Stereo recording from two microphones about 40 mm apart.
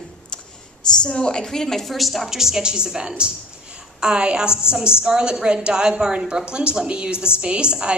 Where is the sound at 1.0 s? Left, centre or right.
Centre.